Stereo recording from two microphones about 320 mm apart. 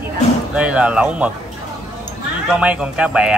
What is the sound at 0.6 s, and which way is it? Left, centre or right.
Speech, centre.